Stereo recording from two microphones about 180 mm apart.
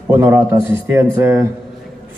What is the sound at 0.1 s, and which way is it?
A man's voice, 15° right (ahead or behind).